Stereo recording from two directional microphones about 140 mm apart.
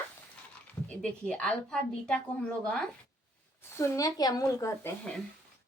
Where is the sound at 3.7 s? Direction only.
20° left (ahead or behind).